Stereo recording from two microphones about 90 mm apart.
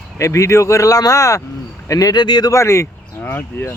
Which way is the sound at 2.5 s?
35° left (ahead or behind).